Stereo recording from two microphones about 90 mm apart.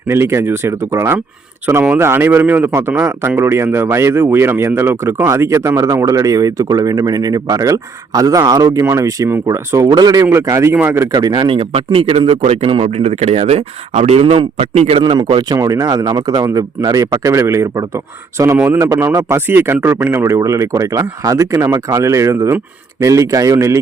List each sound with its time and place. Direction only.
0.1 s speech: 30° right (ahead or behind)
8.8 s speech: 30° right (ahead or behind)
9.9 s speech: 45° right (ahead or behind)
10.4 s speech: 35° right (ahead or behind)
11.2 s speech: 55° right (ahead or behind); by 12.8 s 75° right (ahead or behind)
14.2 s a man's voice: 90° right
14.8 s speech: 80° right; by 15.5 s 60° right (ahead or behind)
15.5 s speech: 40° right (ahead or behind)
18.5 s speech: 20° right (ahead or behind); by 23.7 s 35° right (ahead or behind)